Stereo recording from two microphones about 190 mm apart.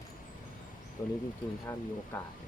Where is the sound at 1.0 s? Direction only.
15° left (ahead or behind).